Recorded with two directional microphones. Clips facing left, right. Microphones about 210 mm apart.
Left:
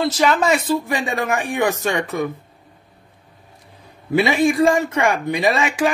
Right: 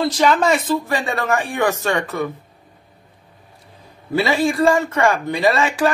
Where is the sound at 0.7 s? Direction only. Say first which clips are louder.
Even; 15° left (ahead or behind).